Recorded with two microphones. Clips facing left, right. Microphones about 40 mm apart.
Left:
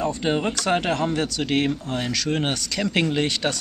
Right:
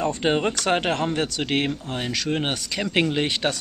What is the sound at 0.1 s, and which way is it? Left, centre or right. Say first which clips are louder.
Speech: right 1 dB; right.